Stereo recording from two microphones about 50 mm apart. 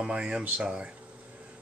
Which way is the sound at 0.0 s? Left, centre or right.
Centre.